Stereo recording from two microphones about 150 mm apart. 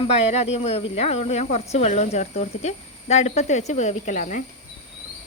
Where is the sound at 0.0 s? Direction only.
45° left (ahead or behind).